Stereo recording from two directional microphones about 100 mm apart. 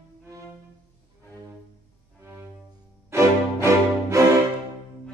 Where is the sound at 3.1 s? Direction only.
30° right (ahead or behind).